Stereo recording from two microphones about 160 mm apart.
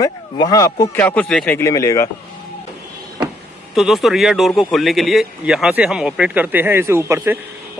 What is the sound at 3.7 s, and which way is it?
Speech, centre (ahead or behind).